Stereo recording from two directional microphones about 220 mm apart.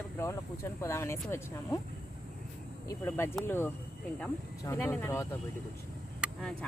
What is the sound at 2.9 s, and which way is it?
Speech, 10° left (ahead or behind).